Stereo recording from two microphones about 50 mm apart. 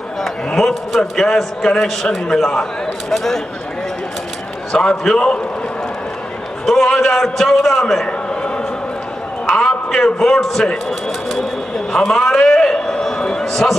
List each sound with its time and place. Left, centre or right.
0.6 s a man's voice: centre
4.7 s a man's voice: centre
6.6 s a man's voice: centre
9.5 s a sound: centre
10.7 s speech: centre
11.9 s a sound: centre